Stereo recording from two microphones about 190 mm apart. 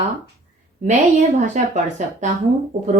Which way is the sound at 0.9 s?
40° right (ahead or behind).